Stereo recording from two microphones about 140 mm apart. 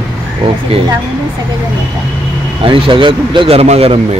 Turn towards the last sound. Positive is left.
turn(degrees=-45)  # may be behind; listen again after turning